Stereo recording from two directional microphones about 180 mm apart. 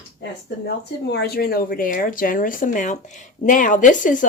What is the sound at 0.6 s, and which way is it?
Speech, 65° left (ahead or behind).